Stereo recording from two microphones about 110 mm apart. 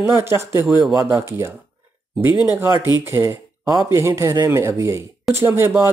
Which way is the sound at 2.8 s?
25° right (ahead or behind).